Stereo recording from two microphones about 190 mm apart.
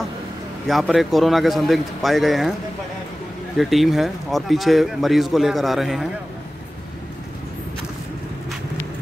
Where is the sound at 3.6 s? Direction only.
Centre (ahead or behind).